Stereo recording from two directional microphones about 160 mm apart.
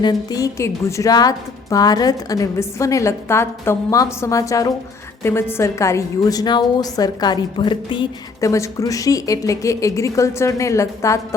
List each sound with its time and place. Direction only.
0.0 s a woman's voice: 25° left (ahead or behind)
8.4 s a woman's voice: 20° left (ahead or behind)